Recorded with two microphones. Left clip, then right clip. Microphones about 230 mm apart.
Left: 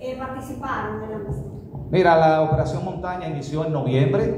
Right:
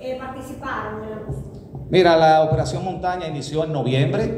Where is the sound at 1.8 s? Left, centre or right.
Right.